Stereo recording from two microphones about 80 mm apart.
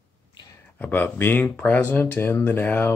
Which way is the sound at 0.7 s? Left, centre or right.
Left.